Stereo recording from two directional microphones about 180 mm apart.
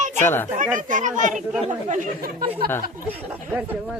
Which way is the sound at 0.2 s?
10° left (ahead or behind).